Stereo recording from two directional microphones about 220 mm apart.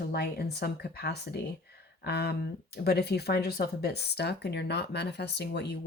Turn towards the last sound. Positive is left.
turn(degrees=50)  # may be behind; listen again after turning